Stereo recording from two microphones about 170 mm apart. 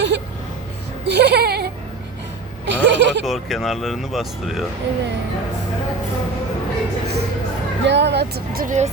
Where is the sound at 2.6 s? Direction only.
90° right.